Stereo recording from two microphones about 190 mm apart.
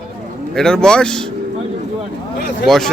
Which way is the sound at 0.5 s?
5° left (ahead or behind).